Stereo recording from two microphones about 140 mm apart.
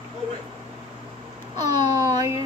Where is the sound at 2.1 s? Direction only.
20° right (ahead or behind).